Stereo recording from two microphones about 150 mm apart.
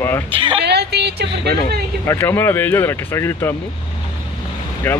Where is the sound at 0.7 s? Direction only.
90° right.